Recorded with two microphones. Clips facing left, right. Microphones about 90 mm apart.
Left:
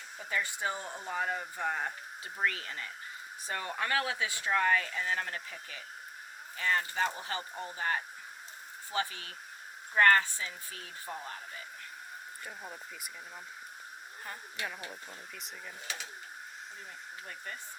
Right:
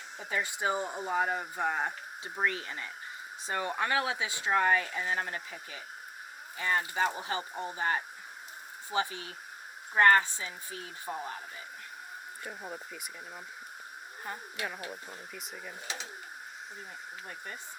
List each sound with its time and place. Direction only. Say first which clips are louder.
0.3 s speech: right 3 dB; 20° right (ahead or behind)
6.6 s speech: right 1 dB; 20° right (ahead or behind)
12.5 s speech: right 5 dB; 5° right (ahead or behind)
17.2 s speech: even; 20° right (ahead or behind)